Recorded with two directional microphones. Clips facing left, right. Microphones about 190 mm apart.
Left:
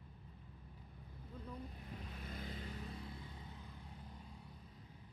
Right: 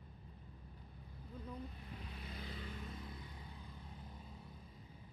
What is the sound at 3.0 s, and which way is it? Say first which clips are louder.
Vehicle: left 1 dB; 20° left (ahead or behind).